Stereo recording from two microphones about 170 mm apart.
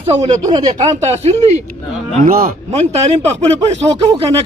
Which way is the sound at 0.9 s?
40° right (ahead or behind).